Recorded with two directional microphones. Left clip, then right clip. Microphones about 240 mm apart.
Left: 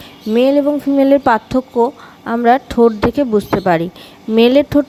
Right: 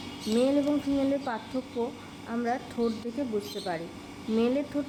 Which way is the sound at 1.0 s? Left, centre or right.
Left.